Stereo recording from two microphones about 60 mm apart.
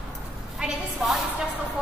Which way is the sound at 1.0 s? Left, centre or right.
Centre.